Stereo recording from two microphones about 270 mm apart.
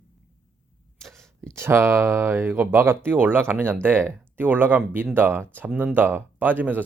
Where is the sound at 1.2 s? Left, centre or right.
Centre.